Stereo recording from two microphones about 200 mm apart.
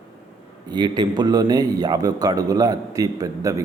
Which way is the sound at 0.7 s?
20° right (ahead or behind).